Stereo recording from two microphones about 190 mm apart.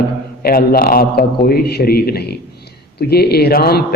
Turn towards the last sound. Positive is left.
turn(degrees=55)  # may be behind; listen again after turning